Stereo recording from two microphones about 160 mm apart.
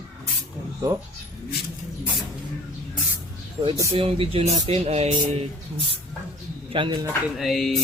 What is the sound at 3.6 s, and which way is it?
Speech, 20° right (ahead or behind).